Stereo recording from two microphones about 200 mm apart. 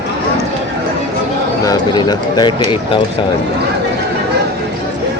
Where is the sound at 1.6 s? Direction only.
20° left (ahead or behind).